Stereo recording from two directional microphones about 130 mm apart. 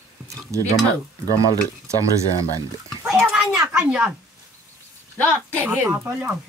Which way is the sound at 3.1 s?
5° right (ahead or behind).